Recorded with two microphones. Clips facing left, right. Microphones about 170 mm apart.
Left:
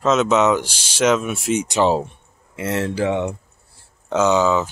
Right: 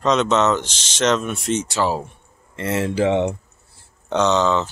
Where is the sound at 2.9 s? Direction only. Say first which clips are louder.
Right 2 dB; 25° right (ahead or behind).